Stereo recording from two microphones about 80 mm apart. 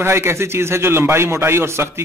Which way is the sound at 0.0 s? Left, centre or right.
Right.